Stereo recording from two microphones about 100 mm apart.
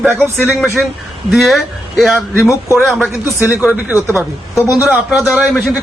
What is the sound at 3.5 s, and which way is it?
A man's voice, 15° right (ahead or behind).